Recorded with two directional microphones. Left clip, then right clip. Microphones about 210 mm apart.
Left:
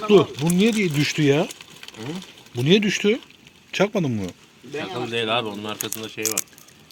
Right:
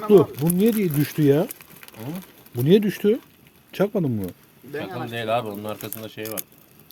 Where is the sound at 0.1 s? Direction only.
25° right (ahead or behind).